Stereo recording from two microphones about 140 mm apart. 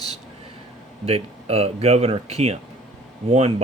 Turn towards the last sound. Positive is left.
turn(degrees=-45)  # may be behind; listen again after turning